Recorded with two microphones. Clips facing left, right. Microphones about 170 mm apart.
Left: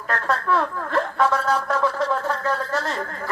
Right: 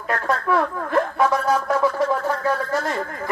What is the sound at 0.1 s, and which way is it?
Speech, 15° right (ahead or behind).